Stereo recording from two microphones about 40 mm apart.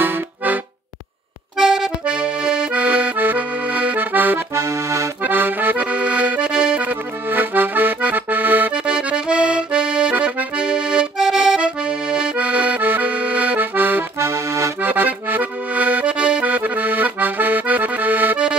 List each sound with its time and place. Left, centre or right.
1.6 s accordion: centre
2.0 s accordion: right
4.0 s accordion: right
5.8 s accordion: right
7.2 s accordion: right
8.7 s accordion: right
13.6 s accordion: right
16.4 s accordion: right